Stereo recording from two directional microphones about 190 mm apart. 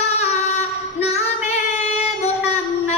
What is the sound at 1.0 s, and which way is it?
Female singing, 35° left (ahead or behind).